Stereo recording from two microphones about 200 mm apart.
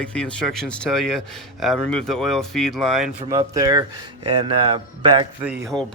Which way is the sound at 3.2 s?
25° right (ahead or behind).